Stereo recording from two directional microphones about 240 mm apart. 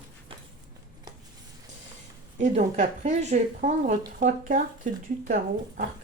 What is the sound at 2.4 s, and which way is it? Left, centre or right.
Speech, right.